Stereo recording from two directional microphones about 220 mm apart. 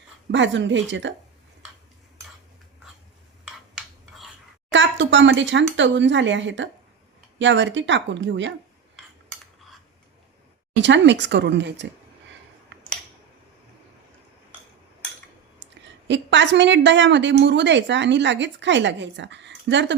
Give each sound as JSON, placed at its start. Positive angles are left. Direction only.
{"t": 0.3, "sound": "a woman's voice", "side_deg": -55}
{"t": 3.4, "sound": "rub", "side_deg": 0}
{"t": 4.7, "sound": "a woman's voice", "side_deg": -55}
{"t": 10.8, "sound": "speech", "side_deg": -55}
{"t": 15.9, "sound": "a woman's voice", "side_deg": -55}